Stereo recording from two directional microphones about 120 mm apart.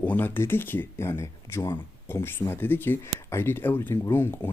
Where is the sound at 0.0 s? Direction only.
15° left (ahead or behind).